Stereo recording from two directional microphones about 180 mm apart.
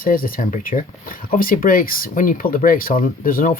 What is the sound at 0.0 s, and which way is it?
Speech, 55° left (ahead or behind).